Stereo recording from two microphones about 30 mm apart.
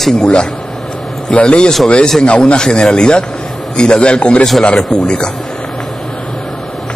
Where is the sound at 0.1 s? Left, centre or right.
Left.